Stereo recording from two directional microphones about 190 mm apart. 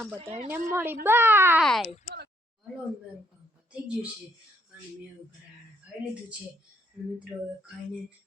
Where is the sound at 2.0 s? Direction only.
55° right (ahead or behind).